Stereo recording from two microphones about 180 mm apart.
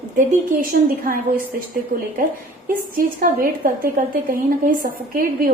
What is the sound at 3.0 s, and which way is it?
A woman's voice, 50° right (ahead or behind).